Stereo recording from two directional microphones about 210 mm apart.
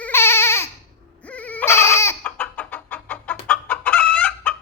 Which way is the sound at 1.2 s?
5° left (ahead or behind).